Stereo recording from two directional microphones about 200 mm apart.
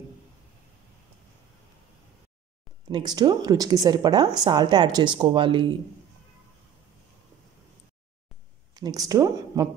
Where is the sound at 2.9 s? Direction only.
20° right (ahead or behind).